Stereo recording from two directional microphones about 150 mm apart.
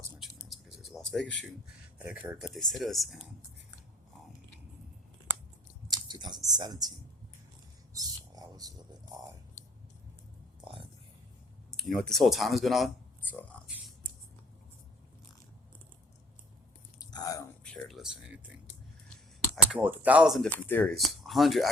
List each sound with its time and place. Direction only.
0.2 s a sound: centre (ahead or behind)
2.0 s speech: 10° right (ahead or behind)
5.9 s chewing: 30° right (ahead or behind)
6.5 s speech: 25° right (ahead or behind)
7.9 s a sound: 25° right (ahead or behind)
10.6 s a sound: 35° right (ahead or behind)
11.7 s speech: centre (ahead or behind)
17.0 s whispering: 25° left (ahead or behind)
17.6 s speech: 5° left (ahead or behind)
19.7 s speech: 10° right (ahead or behind)
20.6 s speech: 10° left (ahead or behind)
21.0 s speech: centre (ahead or behind)